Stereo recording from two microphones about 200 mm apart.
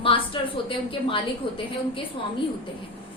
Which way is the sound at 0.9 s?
25° left (ahead or behind).